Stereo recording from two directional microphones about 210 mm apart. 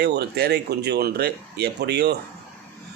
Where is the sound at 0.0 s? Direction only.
50° right (ahead or behind).